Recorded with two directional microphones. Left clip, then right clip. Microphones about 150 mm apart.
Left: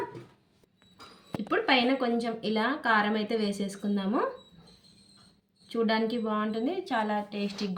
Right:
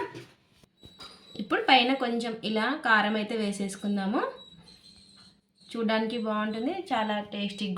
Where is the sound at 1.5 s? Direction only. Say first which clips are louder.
Right 3 dB; 10° right (ahead or behind).